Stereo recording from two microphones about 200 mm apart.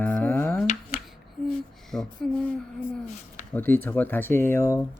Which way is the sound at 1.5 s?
Centre (ahead or behind).